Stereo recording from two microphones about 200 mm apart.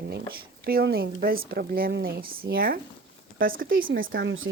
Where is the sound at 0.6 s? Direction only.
50° right (ahead or behind).